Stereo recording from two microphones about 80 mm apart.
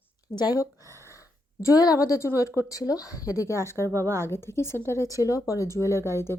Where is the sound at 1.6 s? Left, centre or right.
Left.